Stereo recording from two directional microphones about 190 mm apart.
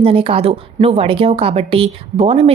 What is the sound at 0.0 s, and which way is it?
A woman's voice, 30° right (ahead or behind).